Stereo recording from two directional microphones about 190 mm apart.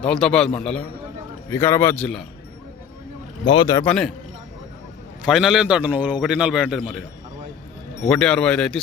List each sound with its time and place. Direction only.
0.0 s a man's voice: 5° left (ahead or behind)
3.4 s speech: 25° left (ahead or behind)
3.8 s a man's voice: 5° left (ahead or behind)
5.2 s a man's voice: centre (ahead or behind)
8.1 s a man's voice: 5° left (ahead or behind)